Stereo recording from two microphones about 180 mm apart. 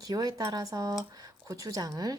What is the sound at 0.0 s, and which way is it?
Speech, 20° right (ahead or behind).